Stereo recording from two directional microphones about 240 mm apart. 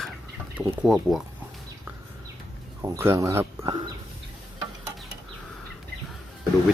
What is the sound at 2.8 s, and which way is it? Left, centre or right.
Speech, centre.